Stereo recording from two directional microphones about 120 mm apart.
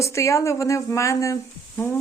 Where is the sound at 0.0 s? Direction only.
25° left (ahead or behind).